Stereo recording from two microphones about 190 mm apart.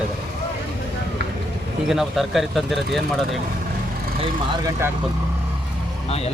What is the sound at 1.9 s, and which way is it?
Speech, centre (ahead or behind).